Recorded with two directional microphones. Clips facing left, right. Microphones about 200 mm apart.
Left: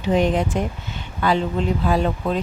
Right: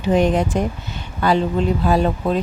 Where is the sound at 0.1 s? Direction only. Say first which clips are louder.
Right 2 dB; 45° right (ahead or behind).